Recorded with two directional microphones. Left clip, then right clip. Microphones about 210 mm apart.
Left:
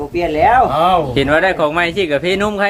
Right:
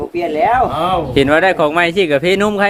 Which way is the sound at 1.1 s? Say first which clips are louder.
Right 2 dB; 50° right (ahead or behind).